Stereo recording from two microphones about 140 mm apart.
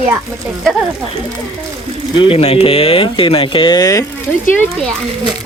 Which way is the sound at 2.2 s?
40° left (ahead or behind).